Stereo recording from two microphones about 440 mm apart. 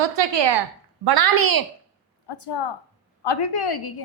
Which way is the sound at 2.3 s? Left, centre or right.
Left.